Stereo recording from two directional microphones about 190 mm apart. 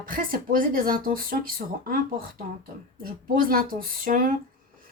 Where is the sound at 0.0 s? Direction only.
45° right (ahead or behind).